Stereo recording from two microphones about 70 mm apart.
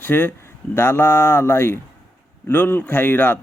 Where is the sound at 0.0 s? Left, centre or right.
Left.